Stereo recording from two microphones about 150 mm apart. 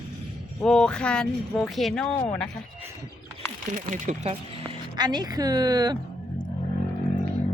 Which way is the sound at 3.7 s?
60° right (ahead or behind).